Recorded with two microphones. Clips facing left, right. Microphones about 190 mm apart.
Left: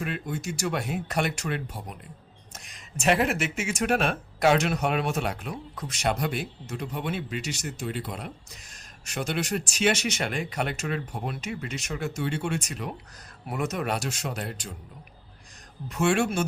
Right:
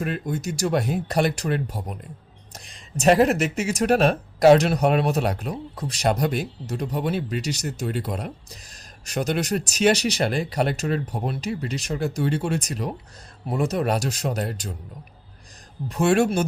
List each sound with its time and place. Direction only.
0.0 s speech: 40° right (ahead or behind)
15.9 s speech: 35° right (ahead or behind)